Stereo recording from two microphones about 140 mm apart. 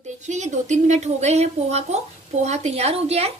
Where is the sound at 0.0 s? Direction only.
60° right (ahead or behind).